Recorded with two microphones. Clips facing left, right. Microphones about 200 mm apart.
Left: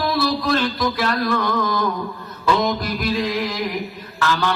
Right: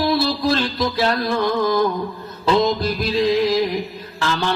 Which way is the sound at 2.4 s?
25° right (ahead or behind).